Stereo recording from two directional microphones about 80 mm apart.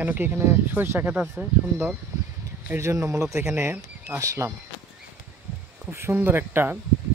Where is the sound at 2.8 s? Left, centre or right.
Right.